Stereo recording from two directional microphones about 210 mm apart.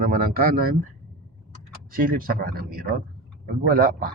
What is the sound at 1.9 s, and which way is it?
A man's voice, 45° right (ahead or behind).